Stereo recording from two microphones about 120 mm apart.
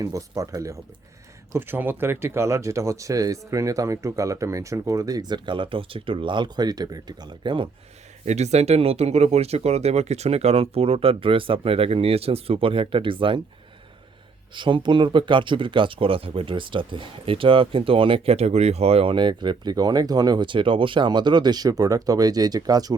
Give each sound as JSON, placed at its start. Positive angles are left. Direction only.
{"t": 0.0, "sound": "speech", "side_deg": -25}
{"t": 1.5, "sound": "speech", "side_deg": -15}
{"t": 8.2, "sound": "speech", "side_deg": -70}
{"t": 14.5, "sound": "speech", "side_deg": -40}